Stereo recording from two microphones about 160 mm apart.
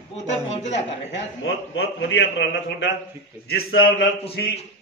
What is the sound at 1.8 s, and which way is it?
A man's voice, 90° left.